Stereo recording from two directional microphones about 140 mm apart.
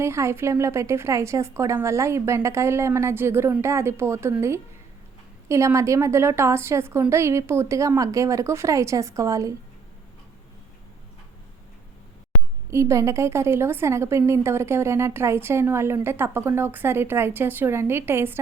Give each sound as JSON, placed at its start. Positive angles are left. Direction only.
{"t": 0.0, "sound": "a woman's voice", "side_deg": -20}
{"t": 12.7, "sound": "a woman's voice", "side_deg": -20}